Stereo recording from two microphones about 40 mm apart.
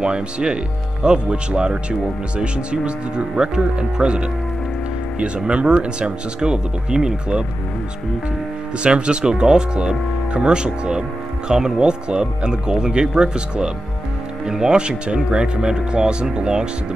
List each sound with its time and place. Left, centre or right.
0.0 s speech: right
8.7 s speech: right